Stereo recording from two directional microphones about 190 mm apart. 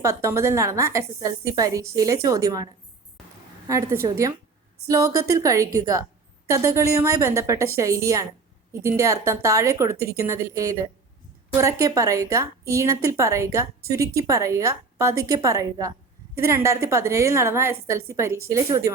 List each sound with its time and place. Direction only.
0.0 s a woman's voice: 15° right (ahead or behind)
3.7 s a woman's voice: 15° right (ahead or behind)